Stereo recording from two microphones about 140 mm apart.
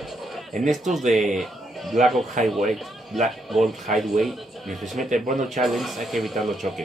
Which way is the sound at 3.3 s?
Centre (ahead or behind).